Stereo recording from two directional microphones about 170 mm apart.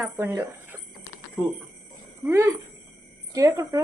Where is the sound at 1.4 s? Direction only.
5° right (ahead or behind).